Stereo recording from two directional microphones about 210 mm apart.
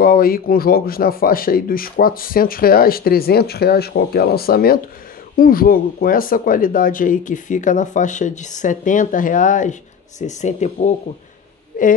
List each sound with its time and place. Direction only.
0.0 s speech: 45° left (ahead or behind)